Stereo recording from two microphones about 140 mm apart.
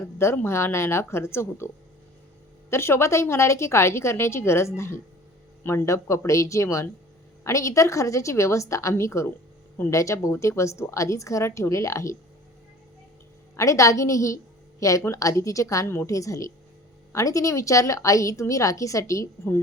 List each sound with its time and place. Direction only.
0.0 s a woman's voice: 20° left (ahead or behind)
13.6 s a woman's voice: 20° left (ahead or behind)